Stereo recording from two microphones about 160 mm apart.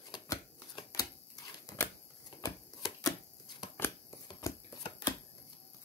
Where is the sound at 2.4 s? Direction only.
20° left (ahead or behind).